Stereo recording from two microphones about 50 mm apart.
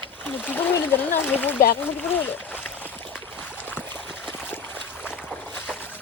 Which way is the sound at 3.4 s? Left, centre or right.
Left.